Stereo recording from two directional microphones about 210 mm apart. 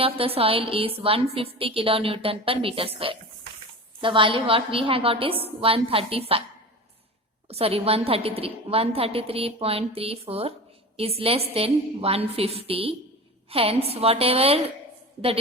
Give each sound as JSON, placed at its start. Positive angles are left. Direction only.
{"t": 0.0, "sound": "a woman's voice", "side_deg": -25}
{"t": 7.5, "sound": "a woman's voice", "side_deg": -30}